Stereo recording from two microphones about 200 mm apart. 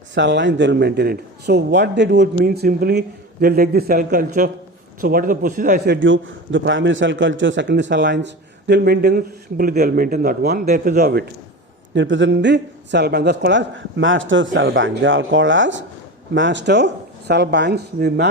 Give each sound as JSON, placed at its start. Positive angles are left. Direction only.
{"t": 0.1, "sound": "a man's voice", "side_deg": -60}
{"t": 11.9, "sound": "a man's voice", "side_deg": -65}